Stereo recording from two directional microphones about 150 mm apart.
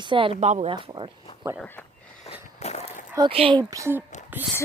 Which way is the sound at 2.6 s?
45° left (ahead or behind).